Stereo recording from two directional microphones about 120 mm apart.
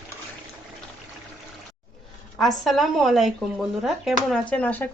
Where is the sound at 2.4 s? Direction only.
Centre (ahead or behind).